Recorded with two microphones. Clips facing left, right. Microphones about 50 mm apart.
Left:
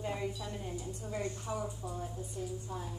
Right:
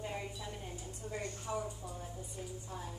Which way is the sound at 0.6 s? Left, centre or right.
Centre.